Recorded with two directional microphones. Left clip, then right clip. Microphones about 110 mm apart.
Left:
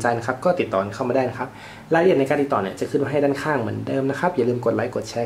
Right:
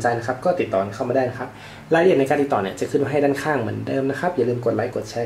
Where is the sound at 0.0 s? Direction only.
25° left (ahead or behind).